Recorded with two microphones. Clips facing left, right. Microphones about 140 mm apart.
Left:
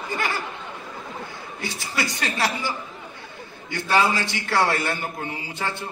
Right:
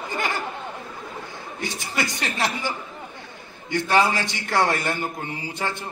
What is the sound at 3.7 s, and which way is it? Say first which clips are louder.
A man's voice: right 1 dB; 15° right (ahead or behind).